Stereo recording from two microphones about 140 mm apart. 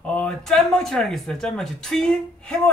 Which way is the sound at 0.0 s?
5° left (ahead or behind).